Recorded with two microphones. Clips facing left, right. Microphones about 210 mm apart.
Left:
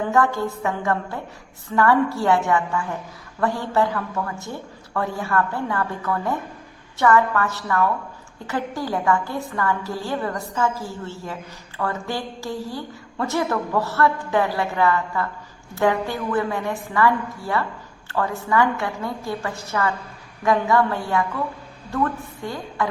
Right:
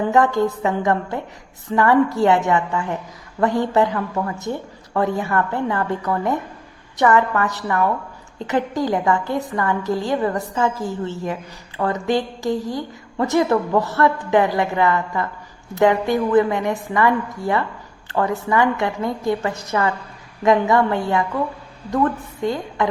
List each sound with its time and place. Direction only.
0.1 s a woman's voice: 20° right (ahead or behind)
22.4 s a woman's voice: 20° right (ahead or behind)